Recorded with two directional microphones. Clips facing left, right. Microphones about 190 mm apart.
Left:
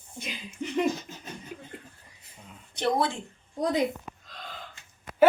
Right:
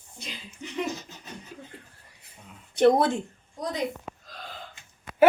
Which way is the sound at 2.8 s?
50° right (ahead or behind).